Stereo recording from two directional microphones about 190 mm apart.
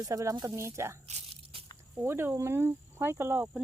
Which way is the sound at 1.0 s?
35° right (ahead or behind).